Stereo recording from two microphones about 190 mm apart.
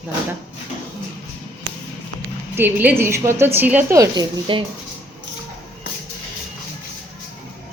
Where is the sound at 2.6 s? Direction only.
10° right (ahead or behind).